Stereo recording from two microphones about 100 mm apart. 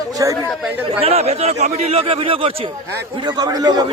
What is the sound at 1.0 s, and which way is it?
Speech, 90° right.